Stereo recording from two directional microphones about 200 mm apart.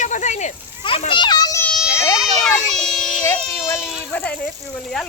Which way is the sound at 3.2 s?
10° left (ahead or behind).